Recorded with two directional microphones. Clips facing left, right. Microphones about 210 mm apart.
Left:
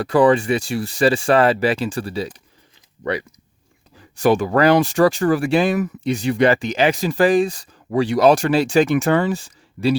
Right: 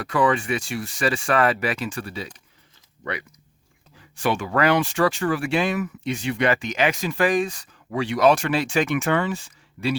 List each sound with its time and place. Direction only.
0.0 s speech: 35° left (ahead or behind)